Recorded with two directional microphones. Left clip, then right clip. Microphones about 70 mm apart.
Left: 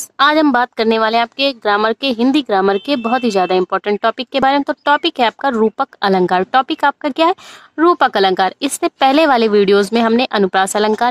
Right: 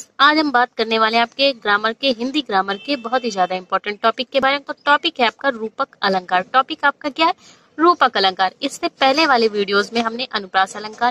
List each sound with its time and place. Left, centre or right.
0.2 s a woman's voice: left
7.0 s speech: left
7.7 s a woman's voice: left